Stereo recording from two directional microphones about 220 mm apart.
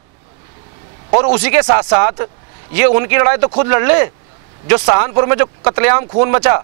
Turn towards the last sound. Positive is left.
turn(degrees=-25)  # may be behind; listen again after turning